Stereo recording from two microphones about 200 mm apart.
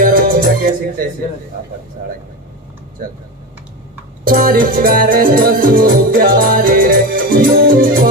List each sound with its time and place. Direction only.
0.0 s music: 45° right (ahead or behind)
4.3 s music: 45° right (ahead or behind)